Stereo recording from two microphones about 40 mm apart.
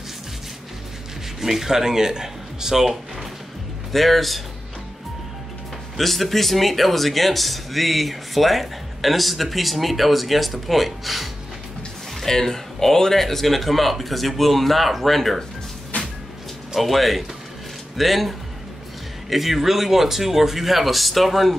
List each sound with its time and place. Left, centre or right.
1.4 s speech: centre
3.9 s speech: centre
5.9 s speech: centre
12.2 s speech: centre
15.9 s a sound: left
16.7 s speech: centre